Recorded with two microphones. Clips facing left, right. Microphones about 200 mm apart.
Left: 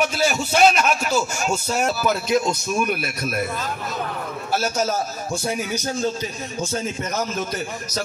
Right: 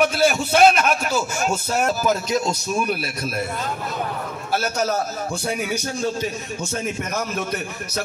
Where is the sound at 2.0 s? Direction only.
40° right (ahead or behind).